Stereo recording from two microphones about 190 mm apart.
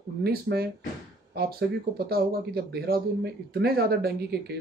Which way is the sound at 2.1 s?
55° right (ahead or behind).